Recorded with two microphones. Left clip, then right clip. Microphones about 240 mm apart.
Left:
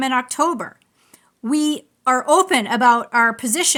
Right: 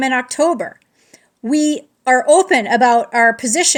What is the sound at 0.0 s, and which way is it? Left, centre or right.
Speech, centre.